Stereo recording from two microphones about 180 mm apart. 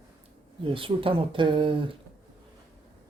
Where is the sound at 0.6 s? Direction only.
30° right (ahead or behind).